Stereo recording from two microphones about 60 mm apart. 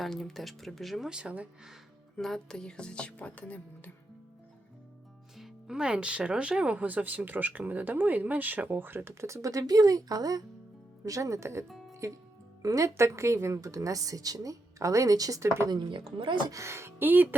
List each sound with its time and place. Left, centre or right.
0.0 s speech: centre
1.1 s speech: centre
2.1 s speech: centre
5.4 s speech: centre; by 9.1 s right
9.2 s speech: right
11.0 s speech: right
12.6 s a woman's voice: right
12.9 s speech: right
13.6 s a woman's voice: right